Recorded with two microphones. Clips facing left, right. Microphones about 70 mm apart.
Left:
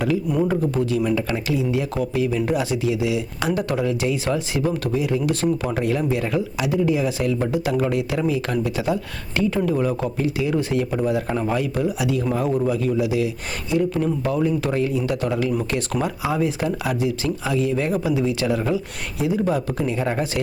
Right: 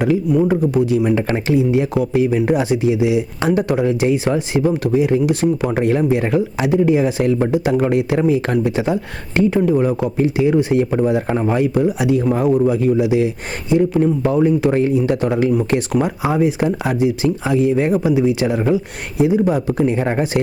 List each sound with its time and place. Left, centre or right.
0.4 s a man's voice: centre
1.1 s a man's voice: right
5.7 s a man's voice: right
19.8 s a man's voice: right